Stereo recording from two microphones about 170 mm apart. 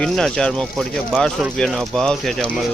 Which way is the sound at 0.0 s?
5° left (ahead or behind).